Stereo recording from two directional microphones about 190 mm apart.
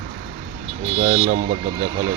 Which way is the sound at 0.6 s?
35° right (ahead or behind).